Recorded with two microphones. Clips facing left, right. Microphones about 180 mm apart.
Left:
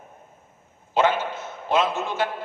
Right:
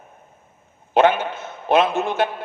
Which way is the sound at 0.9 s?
60° right (ahead or behind).